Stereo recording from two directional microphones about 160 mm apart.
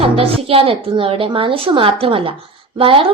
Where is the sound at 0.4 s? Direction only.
35° right (ahead or behind).